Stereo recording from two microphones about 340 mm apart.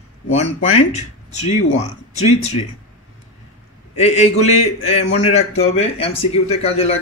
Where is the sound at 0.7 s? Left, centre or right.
Centre.